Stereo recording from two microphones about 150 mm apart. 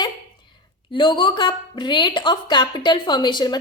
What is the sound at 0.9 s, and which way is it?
A woman's voice, 35° left (ahead or behind).